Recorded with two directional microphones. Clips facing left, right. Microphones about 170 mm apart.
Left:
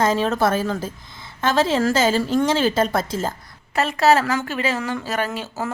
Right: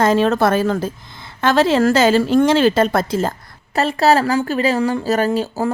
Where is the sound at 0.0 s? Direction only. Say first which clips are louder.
Right 4 dB; 65° right (ahead or behind).